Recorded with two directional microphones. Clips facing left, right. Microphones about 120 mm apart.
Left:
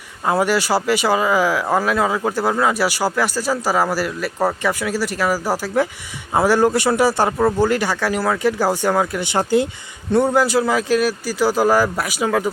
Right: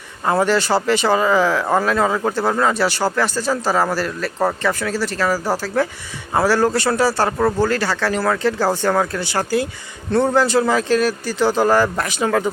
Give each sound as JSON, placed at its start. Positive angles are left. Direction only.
{"t": 0.3, "sound": "speech", "side_deg": 10}
{"t": 10.1, "sound": "speech", "side_deg": 10}